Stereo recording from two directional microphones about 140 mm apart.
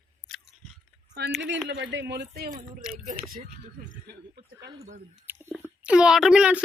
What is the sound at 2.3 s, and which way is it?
Speech, 90° right.